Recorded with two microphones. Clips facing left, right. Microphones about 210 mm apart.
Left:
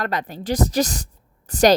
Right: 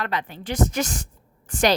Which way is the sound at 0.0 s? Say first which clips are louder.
Left 3 dB; 40° left (ahead or behind).